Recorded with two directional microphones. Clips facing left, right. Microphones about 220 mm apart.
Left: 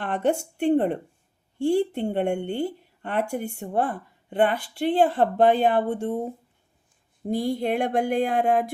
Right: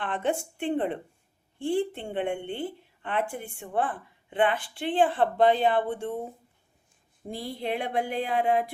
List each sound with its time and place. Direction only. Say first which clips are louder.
0.0 s a woman's voice: left 4 dB; 40° left (ahead or behind)
7.3 s speech: left 8 dB; 45° left (ahead or behind)